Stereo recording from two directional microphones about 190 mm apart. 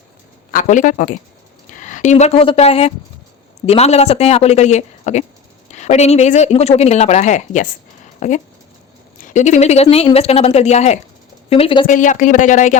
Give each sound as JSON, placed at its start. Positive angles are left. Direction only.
{"t": 0.5, "sound": "a woman's voice", "side_deg": 45}
{"t": 11.9, "sound": "a woman's voice", "side_deg": 40}